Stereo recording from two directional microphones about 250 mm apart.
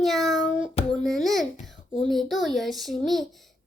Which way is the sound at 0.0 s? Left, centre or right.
Centre.